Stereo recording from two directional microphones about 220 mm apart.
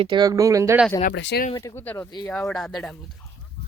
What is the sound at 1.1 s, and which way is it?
Speech, 50° left (ahead or behind).